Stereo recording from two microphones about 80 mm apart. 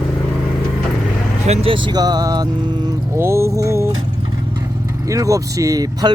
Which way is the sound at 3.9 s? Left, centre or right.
Right.